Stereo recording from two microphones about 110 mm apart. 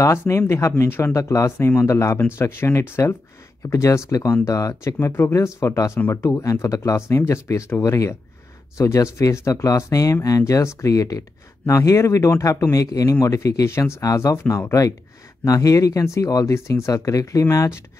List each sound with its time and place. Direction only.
0.0 s speech: 25° left (ahead or behind)